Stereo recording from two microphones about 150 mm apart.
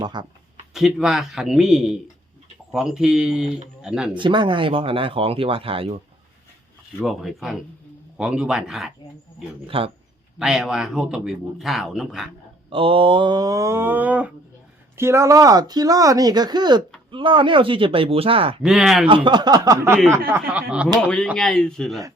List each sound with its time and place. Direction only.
0.0 s speech: 30° right (ahead or behind)
0.7 s a man's voice: centre (ahead or behind)
4.2 s speech: 30° right (ahead or behind)
7.0 s a man's voice: centre (ahead or behind)
9.6 s speech: 35° right (ahead or behind)
10.3 s a man's voice: 5° right (ahead or behind)
12.7 s speech: 35° right (ahead or behind)
18.6 s a man's voice: 5° right (ahead or behind)
19.0 s speech: 35° right (ahead or behind); by 20.8 s 10° right (ahead or behind)
20.8 s a man's voice: 5° left (ahead or behind)